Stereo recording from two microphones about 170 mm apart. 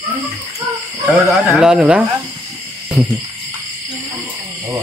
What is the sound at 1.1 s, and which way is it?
Speech, centre (ahead or behind).